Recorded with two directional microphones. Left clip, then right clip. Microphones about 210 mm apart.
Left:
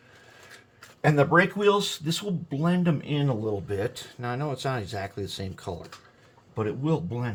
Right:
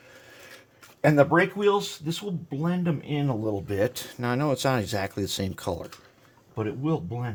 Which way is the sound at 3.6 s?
45° right (ahead or behind).